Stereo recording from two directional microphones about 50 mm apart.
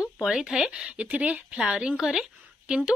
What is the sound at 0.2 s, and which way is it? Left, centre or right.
Speech, centre.